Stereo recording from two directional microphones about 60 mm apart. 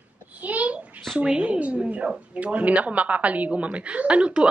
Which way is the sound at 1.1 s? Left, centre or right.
Centre.